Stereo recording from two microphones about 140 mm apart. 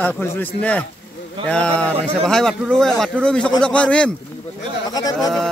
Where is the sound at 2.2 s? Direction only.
5° left (ahead or behind).